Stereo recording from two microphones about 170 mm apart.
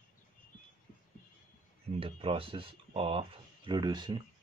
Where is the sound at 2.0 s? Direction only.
30° right (ahead or behind).